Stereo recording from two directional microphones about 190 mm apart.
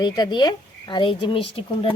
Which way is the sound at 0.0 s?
20° left (ahead or behind).